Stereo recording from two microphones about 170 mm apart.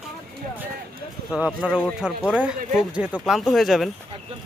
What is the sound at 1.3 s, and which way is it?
Speech, 5° right (ahead or behind).